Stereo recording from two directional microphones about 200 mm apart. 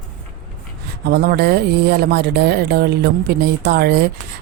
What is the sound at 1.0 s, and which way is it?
Speech, 55° right (ahead or behind).